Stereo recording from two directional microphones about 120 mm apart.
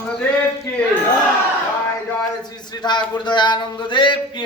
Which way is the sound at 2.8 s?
40° left (ahead or behind).